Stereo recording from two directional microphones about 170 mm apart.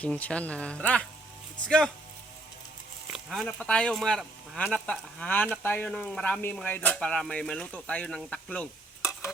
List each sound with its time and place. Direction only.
0.0 s speech: 5° left (ahead or behind)
3.1 s speech: centre (ahead or behind)
9.0 s stir: 20° left (ahead or behind)